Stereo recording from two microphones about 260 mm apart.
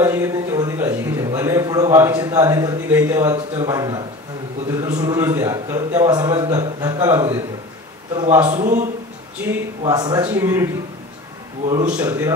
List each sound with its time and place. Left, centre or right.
0.0 s a man's voice: centre
8.5 s a man's voice: right
9.5 s a man's voice: centre
11.6 s a man's voice: right
12.0 s a man's voice: centre